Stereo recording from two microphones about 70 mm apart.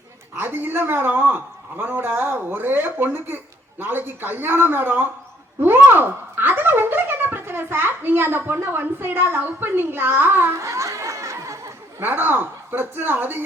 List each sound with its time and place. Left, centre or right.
0.3 s speech: right
10.6 s a sound: right
12.0 s a woman's voice: right